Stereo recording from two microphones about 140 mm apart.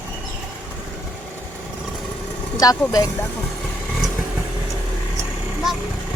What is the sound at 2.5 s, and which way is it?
Speech, 25° left (ahead or behind).